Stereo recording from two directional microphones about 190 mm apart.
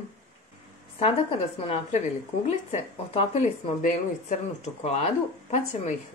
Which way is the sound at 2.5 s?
35° left (ahead or behind).